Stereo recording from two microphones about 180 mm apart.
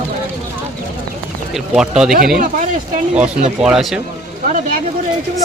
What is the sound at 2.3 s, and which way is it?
Speech, 50° right (ahead or behind).